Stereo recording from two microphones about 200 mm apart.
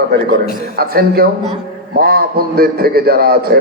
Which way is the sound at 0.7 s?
50° right (ahead or behind).